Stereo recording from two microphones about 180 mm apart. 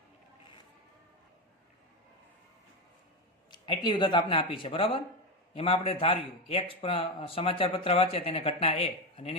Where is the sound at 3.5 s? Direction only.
25° left (ahead or behind).